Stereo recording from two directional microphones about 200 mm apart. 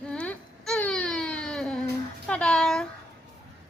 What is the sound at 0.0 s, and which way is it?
Baby cry, 5° left (ahead or behind).